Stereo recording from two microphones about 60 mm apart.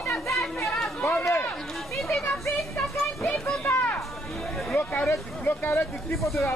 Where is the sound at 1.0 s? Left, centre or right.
Left.